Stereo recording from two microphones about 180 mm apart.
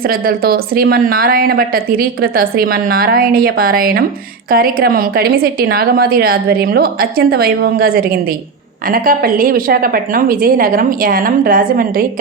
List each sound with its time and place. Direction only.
0.1 s a woman's voice: 55° right (ahead or behind)